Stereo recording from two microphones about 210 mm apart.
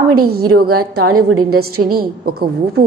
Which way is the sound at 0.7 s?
90° right.